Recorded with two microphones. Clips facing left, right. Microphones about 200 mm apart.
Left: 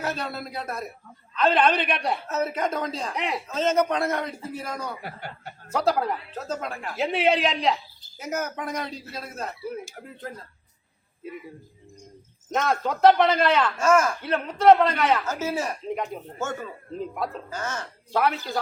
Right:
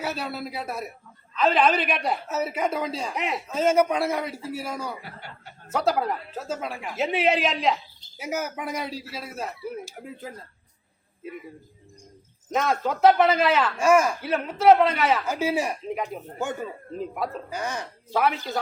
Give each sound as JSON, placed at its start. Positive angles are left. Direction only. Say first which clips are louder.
{"t": 0.0, "sound": "a man's voice", "louder": "even", "side_deg": -5}
{"t": 5.0, "sound": "speech", "louder": "left 5 dB", "side_deg": 50}
{"t": 5.7, "sound": "a man's voice", "louder": "even", "side_deg": 0}
{"t": 12.5, "sound": "speech", "louder": "even", "side_deg": 0}
{"t": 17.5, "sound": "a man's voice", "louder": "right 1 dB", "side_deg": -15}
{"t": 18.1, "sound": "speech", "louder": "even", "side_deg": 0}